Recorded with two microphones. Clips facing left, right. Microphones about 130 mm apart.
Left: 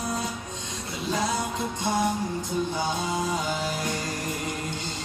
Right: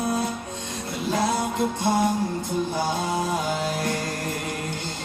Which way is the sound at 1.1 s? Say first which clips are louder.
Right 4 dB; 55° right (ahead or behind).